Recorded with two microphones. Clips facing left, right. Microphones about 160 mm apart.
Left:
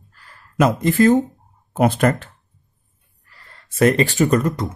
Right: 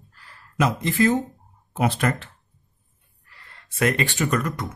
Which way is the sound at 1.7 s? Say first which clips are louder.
Left 6 dB; 50° left (ahead or behind).